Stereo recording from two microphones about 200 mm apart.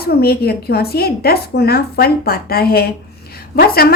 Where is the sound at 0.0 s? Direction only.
50° left (ahead or behind).